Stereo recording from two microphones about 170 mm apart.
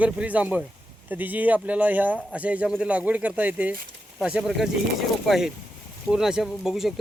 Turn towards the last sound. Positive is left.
turn(degrees=0)  # may be behind; listen again after turning